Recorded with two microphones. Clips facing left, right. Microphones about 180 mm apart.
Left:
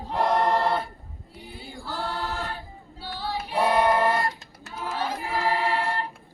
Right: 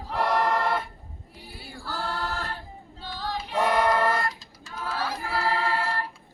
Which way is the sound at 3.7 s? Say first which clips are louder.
Left 2 dB; 25° left (ahead or behind).